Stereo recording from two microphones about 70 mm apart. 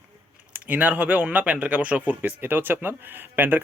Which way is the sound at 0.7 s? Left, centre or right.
Right.